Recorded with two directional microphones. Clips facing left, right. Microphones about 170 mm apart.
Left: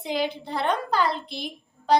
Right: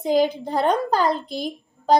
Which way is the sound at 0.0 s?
40° right (ahead or behind).